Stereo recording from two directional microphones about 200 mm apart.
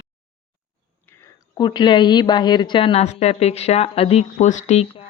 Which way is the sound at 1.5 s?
20° left (ahead or behind).